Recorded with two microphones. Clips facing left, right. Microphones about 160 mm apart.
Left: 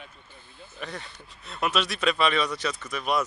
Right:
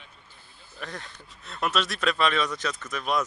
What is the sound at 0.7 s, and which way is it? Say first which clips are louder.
Speech: left 1 dB; 5° left (ahead or behind).